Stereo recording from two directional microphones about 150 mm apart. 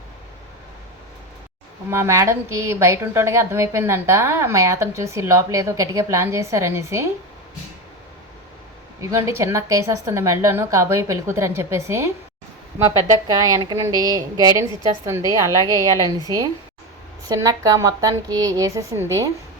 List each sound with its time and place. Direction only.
1.9 s a woman's voice: 20° right (ahead or behind)
9.0 s a woman's voice: 20° right (ahead or behind)
15.7 s a woman's voice: 20° left (ahead or behind)
17.2 s a woman's voice: 25° right (ahead or behind)